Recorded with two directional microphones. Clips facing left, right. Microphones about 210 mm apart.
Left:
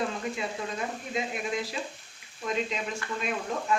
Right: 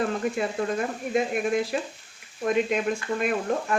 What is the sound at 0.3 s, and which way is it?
Speech, 55° right (ahead or behind).